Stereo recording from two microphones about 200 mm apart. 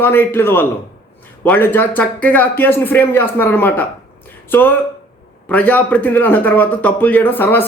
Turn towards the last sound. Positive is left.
turn(degrees=10)  # may be behind; listen again after turning